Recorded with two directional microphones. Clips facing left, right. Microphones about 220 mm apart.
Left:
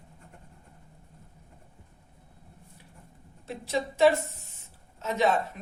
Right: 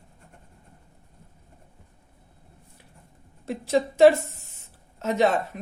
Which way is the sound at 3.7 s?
45° right (ahead or behind).